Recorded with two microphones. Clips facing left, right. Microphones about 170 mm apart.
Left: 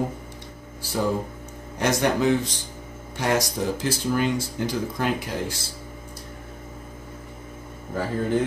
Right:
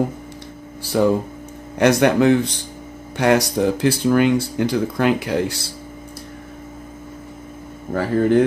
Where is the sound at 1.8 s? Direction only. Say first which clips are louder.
Right 7 dB; 65° right (ahead or behind).